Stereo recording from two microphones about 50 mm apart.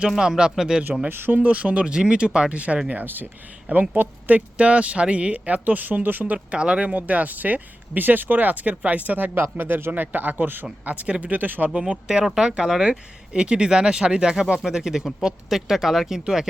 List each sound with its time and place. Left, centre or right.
0.2 s speech: centre
1.0 s speech: right
1.3 s speech: right
2.9 s speech: right
4.4 s speech: right
11.8 s speech: centre